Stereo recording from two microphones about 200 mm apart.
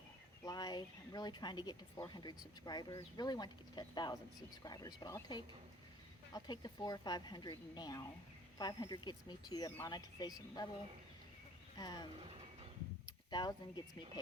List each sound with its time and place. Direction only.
0.4 s speech: 20° left (ahead or behind)
11.8 s speech: 20° left (ahead or behind)
13.3 s speech: 20° left (ahead or behind)